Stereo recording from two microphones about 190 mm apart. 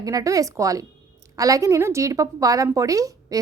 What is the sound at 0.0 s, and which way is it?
A woman's voice, 20° right (ahead or behind).